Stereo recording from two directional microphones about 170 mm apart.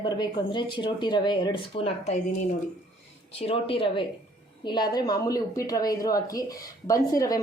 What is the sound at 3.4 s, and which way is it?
Speech, 35° left (ahead or behind).